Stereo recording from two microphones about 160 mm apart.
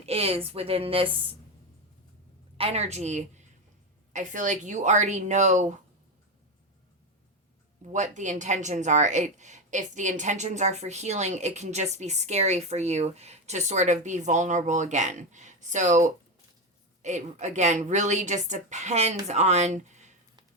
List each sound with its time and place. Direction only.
0.0 s a woman's voice: 40° right (ahead or behind)
2.6 s speech: 40° right (ahead or behind)
7.9 s speech: 50° right (ahead or behind)
17.0 s speech: 45° right (ahead or behind)